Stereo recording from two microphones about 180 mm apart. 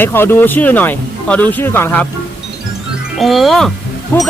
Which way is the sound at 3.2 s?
Centre (ahead or behind).